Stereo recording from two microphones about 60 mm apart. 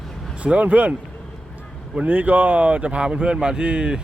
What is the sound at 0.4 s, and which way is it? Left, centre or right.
Speech, right.